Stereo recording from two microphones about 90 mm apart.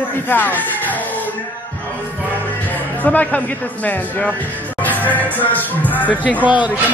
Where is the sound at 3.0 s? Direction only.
15° left (ahead or behind).